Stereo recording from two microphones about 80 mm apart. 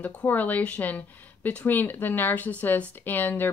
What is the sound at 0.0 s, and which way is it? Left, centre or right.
A woman's voice, centre.